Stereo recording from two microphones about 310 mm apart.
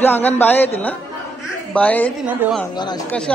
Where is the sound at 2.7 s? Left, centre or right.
Centre.